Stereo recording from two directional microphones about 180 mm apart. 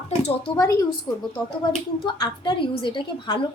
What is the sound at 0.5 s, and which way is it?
Speech, 20° left (ahead or behind).